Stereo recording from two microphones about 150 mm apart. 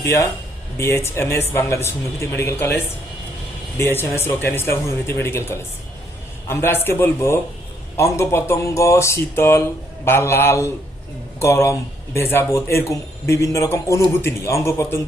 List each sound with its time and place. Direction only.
0.0 s speech: 20° left (ahead or behind)